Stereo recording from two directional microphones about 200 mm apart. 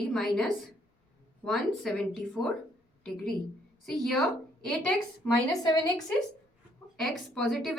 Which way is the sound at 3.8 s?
Centre (ahead or behind).